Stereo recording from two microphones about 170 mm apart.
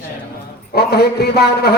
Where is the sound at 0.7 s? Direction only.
70° left (ahead or behind).